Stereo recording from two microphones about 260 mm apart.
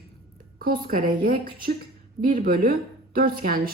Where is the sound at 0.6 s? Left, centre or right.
Right.